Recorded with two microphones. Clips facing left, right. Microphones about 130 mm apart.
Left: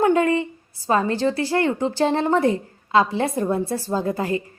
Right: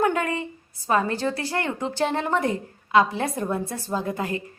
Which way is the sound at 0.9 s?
30° left (ahead or behind).